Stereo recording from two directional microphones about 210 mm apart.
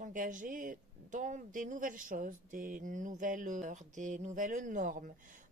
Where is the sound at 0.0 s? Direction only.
40° right (ahead or behind).